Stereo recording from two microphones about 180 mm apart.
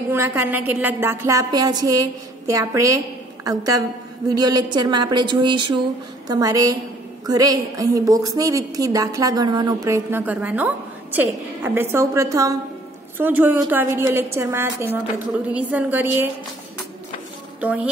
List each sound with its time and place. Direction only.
0.1 s a woman's voice: 15° right (ahead or behind)